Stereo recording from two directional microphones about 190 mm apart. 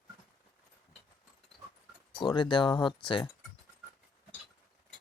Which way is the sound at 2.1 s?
25° left (ahead or behind).